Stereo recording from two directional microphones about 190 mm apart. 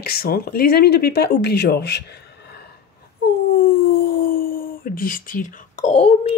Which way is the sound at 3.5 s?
50° left (ahead or behind).